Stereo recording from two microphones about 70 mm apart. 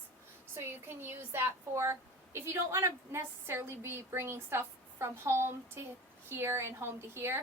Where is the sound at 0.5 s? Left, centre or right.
Right.